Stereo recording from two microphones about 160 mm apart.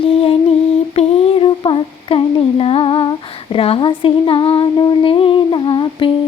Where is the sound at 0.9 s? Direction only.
35° left (ahead or behind).